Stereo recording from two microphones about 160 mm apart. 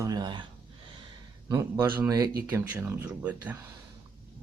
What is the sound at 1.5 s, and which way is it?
Speech, 25° right (ahead or behind).